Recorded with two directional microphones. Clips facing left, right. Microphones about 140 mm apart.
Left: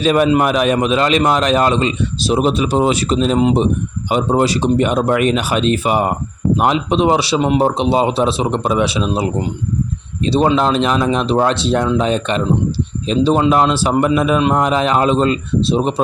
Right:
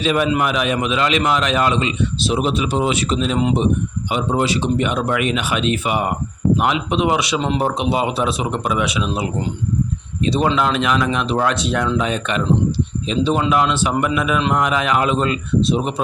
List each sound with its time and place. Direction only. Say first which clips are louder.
0.0 s a man's voice: left 5 dB; 45° left (ahead or behind)
4.1 s a man's voice: left 4 dB; 40° left (ahead or behind)